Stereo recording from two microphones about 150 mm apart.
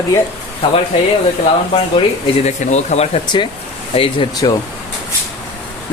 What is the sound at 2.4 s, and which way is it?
Speech, 50° left (ahead or behind).